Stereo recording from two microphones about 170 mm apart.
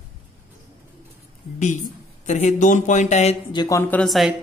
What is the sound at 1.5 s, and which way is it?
Speech, 45° left (ahead or behind).